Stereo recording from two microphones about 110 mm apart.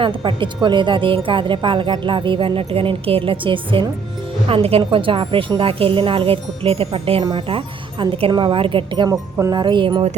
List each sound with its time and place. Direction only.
0.3 s speech: 50° right (ahead or behind)
7.3 s speech: 50° right (ahead or behind)
9.0 s speech: 35° right (ahead or behind)